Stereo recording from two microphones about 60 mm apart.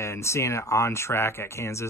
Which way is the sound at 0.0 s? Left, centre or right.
Left.